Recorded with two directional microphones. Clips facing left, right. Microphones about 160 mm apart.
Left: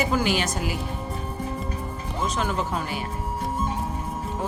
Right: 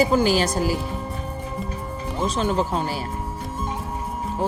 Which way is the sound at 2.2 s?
30° right (ahead or behind).